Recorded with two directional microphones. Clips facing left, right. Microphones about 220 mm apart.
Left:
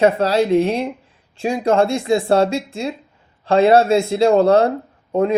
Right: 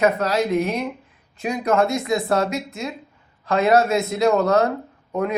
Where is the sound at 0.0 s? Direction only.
30° left (ahead or behind).